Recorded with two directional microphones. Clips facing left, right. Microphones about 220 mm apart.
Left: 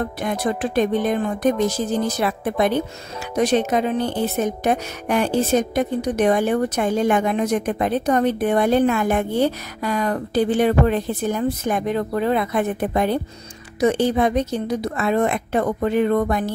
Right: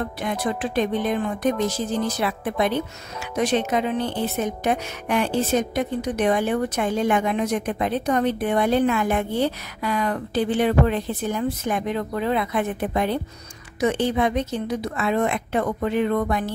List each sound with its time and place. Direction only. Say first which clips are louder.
0.2 s a woman's voice: left 3 dB; 45° left (ahead or behind)